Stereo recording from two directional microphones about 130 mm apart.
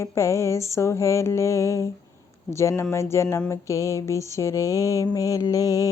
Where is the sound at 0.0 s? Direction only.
25° left (ahead or behind).